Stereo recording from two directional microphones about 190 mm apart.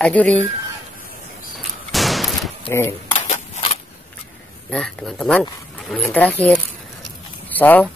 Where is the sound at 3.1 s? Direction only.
30° left (ahead or behind).